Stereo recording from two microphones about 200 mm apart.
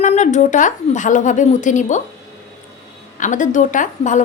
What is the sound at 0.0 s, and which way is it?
A woman's voice, 35° left (ahead or behind).